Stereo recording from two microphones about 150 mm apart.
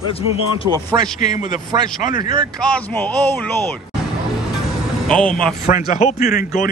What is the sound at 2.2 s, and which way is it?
Speech, 25° right (ahead or behind).